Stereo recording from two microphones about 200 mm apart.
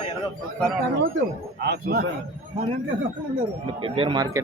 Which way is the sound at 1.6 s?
55° right (ahead or behind).